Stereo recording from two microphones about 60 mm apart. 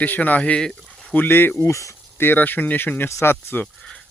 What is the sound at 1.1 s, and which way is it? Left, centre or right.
Speech, left.